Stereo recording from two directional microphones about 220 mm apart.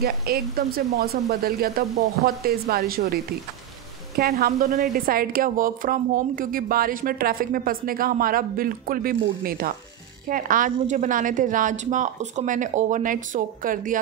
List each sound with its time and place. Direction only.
0.0 s speech: 45° right (ahead or behind)
4.2 s a woman's voice: 45° right (ahead or behind)